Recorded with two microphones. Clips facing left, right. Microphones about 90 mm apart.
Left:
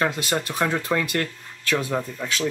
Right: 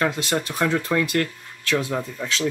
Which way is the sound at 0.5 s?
15° left (ahead or behind).